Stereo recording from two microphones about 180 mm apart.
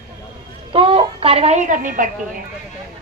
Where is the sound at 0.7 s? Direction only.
30° right (ahead or behind); by 2.0 s 45° right (ahead or behind).